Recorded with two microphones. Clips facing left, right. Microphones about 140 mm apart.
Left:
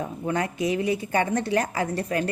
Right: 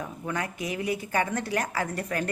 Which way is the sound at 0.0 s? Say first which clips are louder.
Left 5 dB; 30° left (ahead or behind).